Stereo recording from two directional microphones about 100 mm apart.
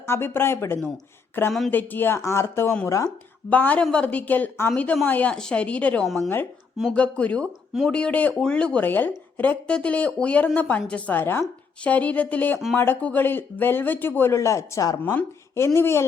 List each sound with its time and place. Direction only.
0.0 s speech: 25° left (ahead or behind)
3.5 s speech: 15° left (ahead or behind)